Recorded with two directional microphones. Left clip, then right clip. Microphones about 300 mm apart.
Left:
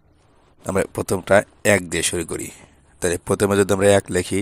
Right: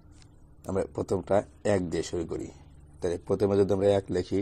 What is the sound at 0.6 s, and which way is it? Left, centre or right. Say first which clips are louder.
Speech: left 8 dB; left.